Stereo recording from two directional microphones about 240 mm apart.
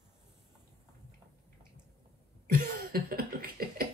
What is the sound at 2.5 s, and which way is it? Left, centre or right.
Cough, right.